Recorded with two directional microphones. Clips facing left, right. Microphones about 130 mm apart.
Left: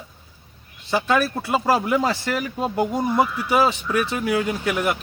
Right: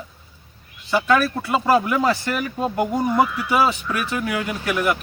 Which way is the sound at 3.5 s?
25° left (ahead or behind).